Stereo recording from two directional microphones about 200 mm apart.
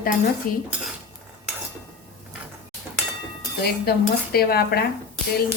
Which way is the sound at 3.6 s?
50° left (ahead or behind).